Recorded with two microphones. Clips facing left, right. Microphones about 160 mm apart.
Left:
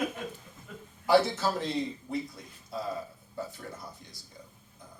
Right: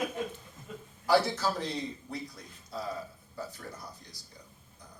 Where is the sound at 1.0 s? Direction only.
20° left (ahead or behind).